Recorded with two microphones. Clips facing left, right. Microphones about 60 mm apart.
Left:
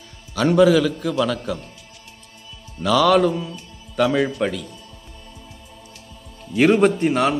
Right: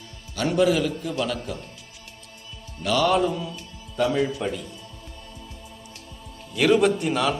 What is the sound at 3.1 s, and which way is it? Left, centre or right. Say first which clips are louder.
Mantra: left 6 dB; left.